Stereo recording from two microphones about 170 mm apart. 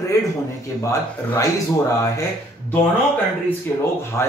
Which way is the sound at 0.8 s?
20° left (ahead or behind).